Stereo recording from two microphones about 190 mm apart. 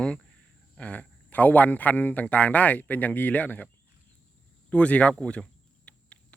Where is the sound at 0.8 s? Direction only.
5° left (ahead or behind).